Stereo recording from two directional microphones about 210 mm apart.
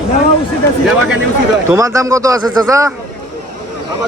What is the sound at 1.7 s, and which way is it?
Speech, 15° right (ahead or behind).